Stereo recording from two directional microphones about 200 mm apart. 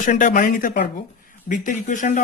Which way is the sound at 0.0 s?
40° left (ahead or behind).